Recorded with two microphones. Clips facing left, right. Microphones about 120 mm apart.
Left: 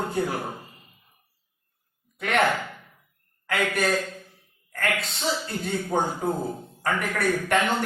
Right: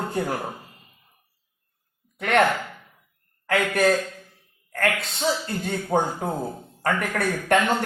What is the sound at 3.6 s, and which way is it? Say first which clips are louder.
Speech: right 4 dB; 35° right (ahead or behind).